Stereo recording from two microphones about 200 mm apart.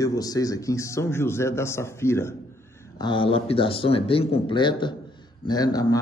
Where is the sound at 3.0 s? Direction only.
25° left (ahead or behind).